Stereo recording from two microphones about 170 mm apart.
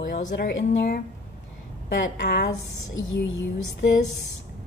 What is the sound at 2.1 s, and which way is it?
Speech, 75° left (ahead or behind).